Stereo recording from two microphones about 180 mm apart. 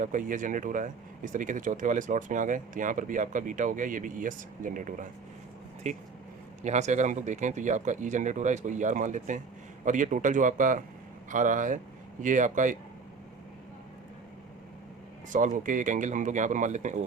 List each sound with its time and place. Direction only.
0.0 s speech: 45° right (ahead or behind)
15.3 s speech: 45° right (ahead or behind)